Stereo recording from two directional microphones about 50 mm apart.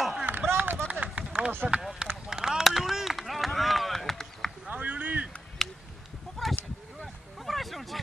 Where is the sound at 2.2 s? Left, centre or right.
Centre.